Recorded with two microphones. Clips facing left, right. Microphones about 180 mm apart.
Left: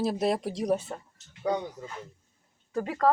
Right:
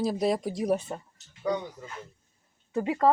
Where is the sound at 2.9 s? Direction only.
15° right (ahead or behind).